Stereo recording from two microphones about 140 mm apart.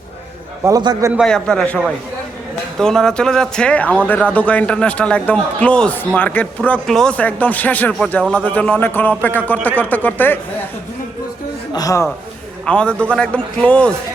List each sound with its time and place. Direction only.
0.6 s a man's voice: 30° right (ahead or behind)
1.1 s a man's voice: 5° left (ahead or behind)
11.7 s a man's voice: 25° left (ahead or behind)
12.6 s a man's voice: 5° left (ahead or behind)